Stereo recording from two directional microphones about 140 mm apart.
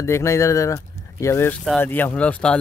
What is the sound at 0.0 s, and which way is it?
Speech, 20° left (ahead or behind).